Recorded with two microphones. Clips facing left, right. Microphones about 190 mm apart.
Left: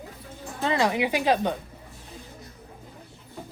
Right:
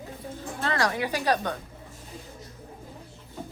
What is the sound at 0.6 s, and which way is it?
Speech, 20° left (ahead or behind).